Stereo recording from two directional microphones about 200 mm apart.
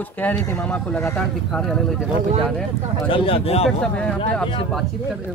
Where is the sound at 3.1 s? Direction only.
25° left (ahead or behind).